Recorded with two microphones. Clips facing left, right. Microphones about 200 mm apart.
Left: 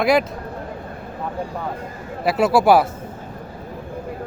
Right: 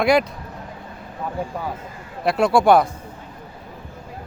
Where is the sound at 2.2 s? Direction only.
5° left (ahead or behind).